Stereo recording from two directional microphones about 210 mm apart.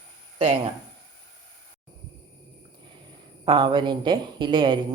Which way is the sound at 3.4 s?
25° right (ahead or behind).